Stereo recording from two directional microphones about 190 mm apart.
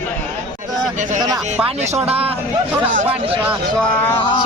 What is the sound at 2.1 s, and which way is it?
Speech, 30° right (ahead or behind).